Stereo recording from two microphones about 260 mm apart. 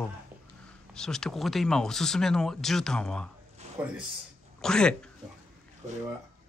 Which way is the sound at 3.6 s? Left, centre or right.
Right.